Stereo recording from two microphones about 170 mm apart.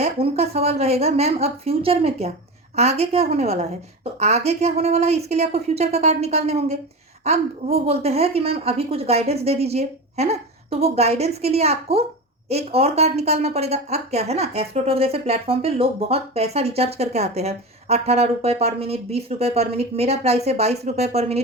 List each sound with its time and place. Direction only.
0.0 s speech: 40° right (ahead or behind)